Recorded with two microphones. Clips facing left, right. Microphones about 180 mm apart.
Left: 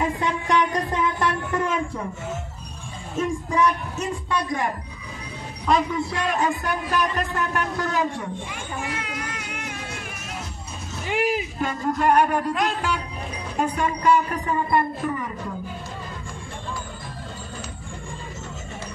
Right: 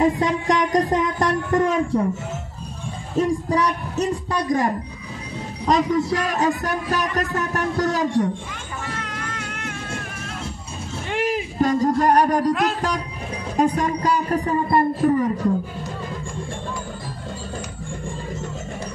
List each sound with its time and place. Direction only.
0.0 s a sound: 40° right (ahead or behind)
3.2 s a man's voice: 35° right (ahead or behind)
5.7 s a man's voice: 40° right (ahead or behind)
8.8 s cat: 10° left (ahead or behind)
11.1 s speech: 5° left (ahead or behind)
11.6 s a man's voice: 35° right (ahead or behind)